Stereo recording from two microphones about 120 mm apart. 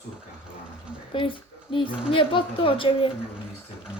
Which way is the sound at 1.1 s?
45° left (ahead or behind).